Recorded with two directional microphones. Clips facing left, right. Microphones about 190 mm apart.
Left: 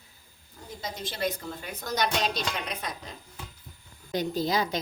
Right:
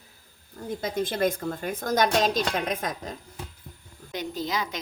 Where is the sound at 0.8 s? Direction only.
55° right (ahead or behind).